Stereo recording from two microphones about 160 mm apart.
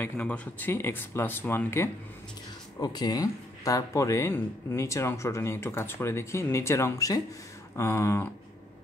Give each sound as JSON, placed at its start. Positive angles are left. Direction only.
{"t": 0.0, "sound": "speech", "side_deg": 10}
{"t": 2.8, "sound": "speech", "side_deg": 25}